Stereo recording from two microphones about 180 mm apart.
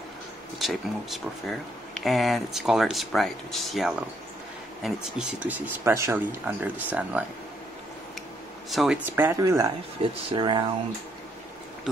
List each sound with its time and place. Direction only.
0.6 s speech: centre (ahead or behind)
8.6 s speech: centre (ahead or behind)
10.0 s speech: 35° right (ahead or behind)